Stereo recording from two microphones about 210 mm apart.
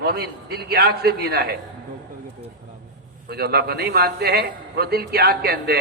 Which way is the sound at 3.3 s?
50° right (ahead or behind).